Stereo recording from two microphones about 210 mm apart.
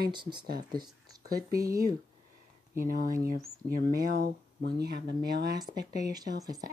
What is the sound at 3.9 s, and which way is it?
Speech, 50° right (ahead or behind).